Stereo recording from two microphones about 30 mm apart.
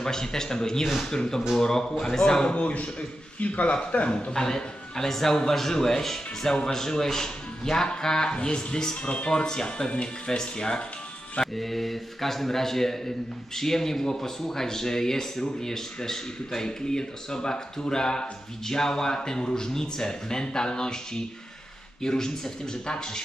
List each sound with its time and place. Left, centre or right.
0.0 s speech: centre
2.5 s speech: left
4.3 s a man's voice: left
8.3 s speech: left
11.5 s a man's voice: centre; by 23.2 s left